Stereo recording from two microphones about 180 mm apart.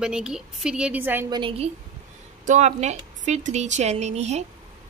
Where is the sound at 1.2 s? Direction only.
25° right (ahead or behind).